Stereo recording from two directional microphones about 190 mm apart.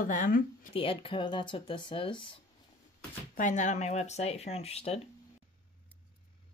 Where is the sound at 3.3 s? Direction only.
40° left (ahead or behind).